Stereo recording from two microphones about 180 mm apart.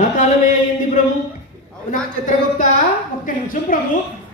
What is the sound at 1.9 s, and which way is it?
Speech, 45° left (ahead or behind).